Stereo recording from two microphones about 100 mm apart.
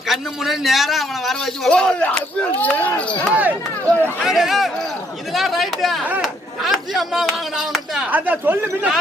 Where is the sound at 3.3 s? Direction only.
15° right (ahead or behind).